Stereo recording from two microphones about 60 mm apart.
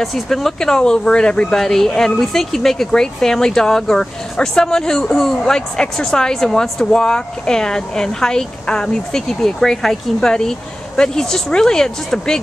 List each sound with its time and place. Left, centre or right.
0.0 s speech: centre